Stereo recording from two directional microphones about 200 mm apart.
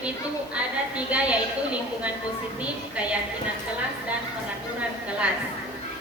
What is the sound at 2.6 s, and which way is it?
Speech, 5° right (ahead or behind).